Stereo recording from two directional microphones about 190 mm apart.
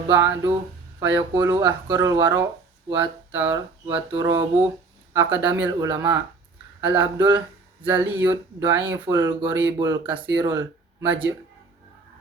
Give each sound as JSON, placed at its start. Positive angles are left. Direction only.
{"t": 0.1, "sound": "speech", "side_deg": -15}
{"t": 9.7, "sound": "speech", "side_deg": -20}